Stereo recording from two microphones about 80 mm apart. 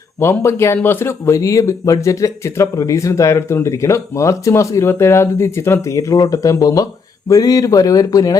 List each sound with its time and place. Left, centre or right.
0.2 s speech: left